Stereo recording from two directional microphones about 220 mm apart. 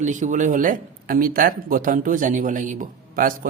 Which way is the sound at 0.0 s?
35° right (ahead or behind).